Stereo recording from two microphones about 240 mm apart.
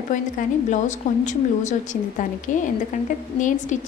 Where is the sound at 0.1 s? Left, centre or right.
Left.